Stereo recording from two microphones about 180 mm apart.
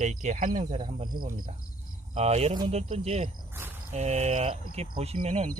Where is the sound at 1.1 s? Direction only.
50° right (ahead or behind).